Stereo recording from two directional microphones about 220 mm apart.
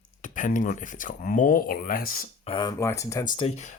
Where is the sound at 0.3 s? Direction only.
35° left (ahead or behind).